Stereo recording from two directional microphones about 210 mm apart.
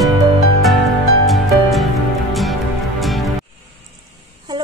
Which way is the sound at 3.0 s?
Centre (ahead or behind).